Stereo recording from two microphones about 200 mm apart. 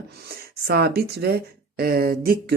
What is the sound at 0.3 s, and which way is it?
Speech, 55° right (ahead or behind).